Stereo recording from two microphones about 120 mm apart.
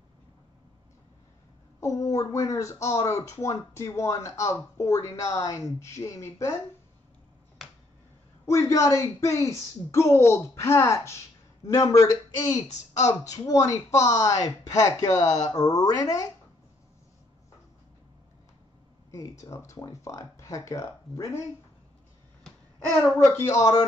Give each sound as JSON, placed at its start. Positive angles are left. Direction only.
{"t": 1.8, "sound": "speech", "side_deg": 25}
{"t": 8.5, "sound": "speech", "side_deg": 25}
{"t": 19.1, "sound": "speech", "side_deg": 30}
{"t": 23.1, "sound": "speech", "side_deg": 20}